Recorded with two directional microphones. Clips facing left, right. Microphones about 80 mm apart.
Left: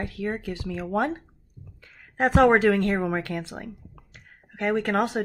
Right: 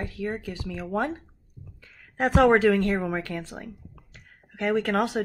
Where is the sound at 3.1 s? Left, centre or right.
Left.